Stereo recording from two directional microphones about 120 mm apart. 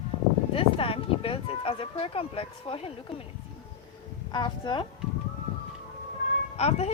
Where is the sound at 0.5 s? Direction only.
50° left (ahead or behind).